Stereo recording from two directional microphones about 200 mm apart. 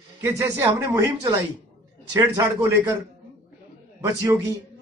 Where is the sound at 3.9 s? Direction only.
15° right (ahead or behind).